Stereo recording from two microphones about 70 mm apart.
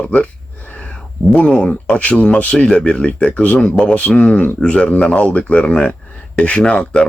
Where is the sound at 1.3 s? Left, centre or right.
Centre.